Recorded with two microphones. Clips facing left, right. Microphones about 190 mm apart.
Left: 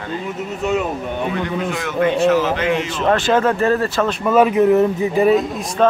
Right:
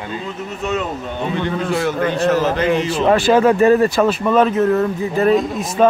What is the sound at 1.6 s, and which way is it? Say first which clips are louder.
A man's voice: left 1 dB; 35° right (ahead or behind).